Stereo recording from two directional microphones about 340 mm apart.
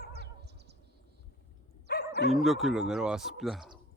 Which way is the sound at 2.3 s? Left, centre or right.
Centre.